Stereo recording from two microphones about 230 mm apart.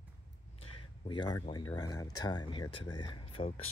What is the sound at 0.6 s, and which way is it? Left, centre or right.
Speech, left.